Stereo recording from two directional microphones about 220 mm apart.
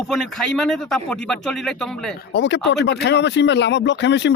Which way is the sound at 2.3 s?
50° left (ahead or behind).